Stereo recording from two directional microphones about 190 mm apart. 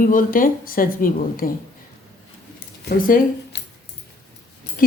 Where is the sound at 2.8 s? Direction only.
60° left (ahead or behind).